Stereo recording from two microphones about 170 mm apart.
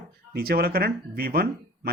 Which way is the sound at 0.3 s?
65° right (ahead or behind).